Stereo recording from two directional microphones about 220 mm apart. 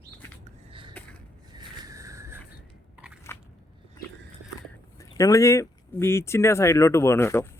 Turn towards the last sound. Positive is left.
turn(degrees=10)  # may be behind; listen again after turning